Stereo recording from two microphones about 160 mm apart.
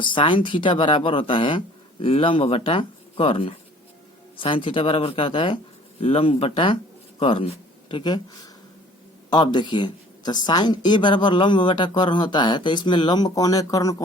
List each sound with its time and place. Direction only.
0.0 s speech: 30° left (ahead or behind)
9.3 s speech: 30° left (ahead or behind)